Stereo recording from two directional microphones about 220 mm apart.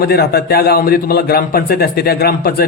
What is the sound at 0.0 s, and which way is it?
A man's voice, 45° left (ahead or behind).